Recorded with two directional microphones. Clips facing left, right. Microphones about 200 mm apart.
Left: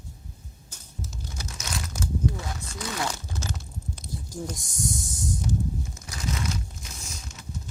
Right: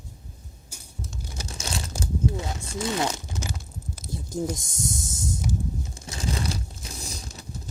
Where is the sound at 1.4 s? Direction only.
30° right (ahead or behind).